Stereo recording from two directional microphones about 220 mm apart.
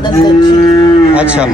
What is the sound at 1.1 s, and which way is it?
Speech, 5° right (ahead or behind).